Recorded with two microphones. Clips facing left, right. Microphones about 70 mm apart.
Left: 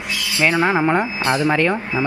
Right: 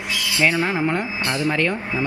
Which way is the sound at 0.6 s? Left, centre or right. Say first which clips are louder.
Left 5 dB; left.